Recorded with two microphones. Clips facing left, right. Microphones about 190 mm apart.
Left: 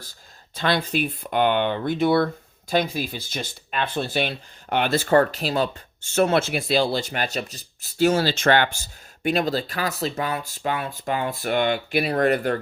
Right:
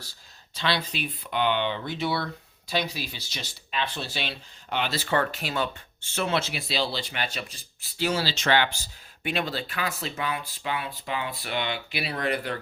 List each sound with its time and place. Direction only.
0.0 s speech: 50° left (ahead or behind)